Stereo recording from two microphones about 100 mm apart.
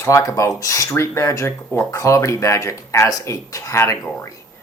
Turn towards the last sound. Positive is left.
turn(degrees=30)  # may be behind; listen again after turning